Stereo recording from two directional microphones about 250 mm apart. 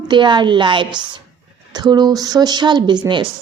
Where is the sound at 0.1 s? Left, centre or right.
Centre.